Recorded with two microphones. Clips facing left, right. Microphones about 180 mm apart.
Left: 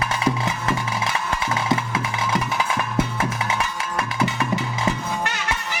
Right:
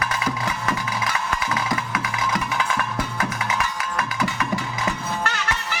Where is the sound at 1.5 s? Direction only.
25° left (ahead or behind).